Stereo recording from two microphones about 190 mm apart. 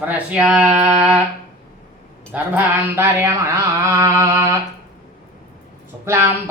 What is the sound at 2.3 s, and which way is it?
Speech, 10° right (ahead or behind).